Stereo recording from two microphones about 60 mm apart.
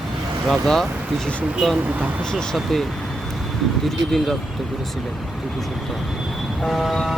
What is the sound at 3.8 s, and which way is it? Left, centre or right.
Speech, centre.